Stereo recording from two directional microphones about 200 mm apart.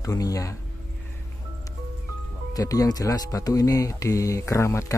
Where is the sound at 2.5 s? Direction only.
15° left (ahead or behind).